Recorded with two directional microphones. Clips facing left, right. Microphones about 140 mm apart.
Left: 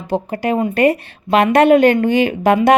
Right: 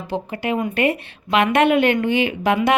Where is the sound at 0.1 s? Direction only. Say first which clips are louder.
Left 5 dB; 40° left (ahead or behind).